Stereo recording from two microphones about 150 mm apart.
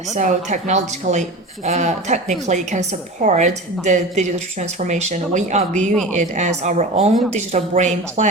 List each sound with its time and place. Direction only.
0.1 s speech: 55° right (ahead or behind)